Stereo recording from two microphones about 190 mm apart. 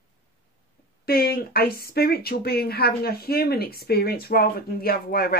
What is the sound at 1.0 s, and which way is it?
Speech, 55° left (ahead or behind).